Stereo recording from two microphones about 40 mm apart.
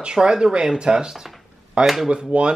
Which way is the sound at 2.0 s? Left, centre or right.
Right.